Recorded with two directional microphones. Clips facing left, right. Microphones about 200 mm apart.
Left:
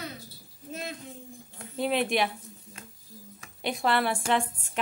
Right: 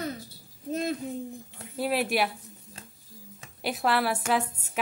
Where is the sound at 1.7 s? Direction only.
5° right (ahead or behind).